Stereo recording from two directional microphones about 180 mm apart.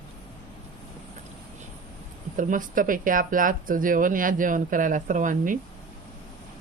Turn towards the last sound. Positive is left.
turn(degrees=-45)  # may be behind; listen again after turning